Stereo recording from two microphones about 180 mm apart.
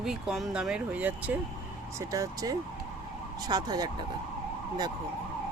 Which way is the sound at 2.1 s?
20° right (ahead or behind).